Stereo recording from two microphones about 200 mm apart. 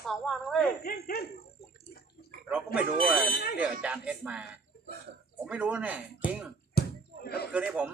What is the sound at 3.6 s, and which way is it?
Speech, 5° right (ahead or behind).